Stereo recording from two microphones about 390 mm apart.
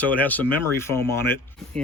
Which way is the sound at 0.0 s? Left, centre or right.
Centre.